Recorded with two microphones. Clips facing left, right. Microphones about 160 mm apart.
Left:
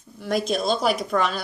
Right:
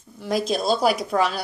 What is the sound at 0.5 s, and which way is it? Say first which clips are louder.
Speech: right 3 dB; 5° right (ahead or behind).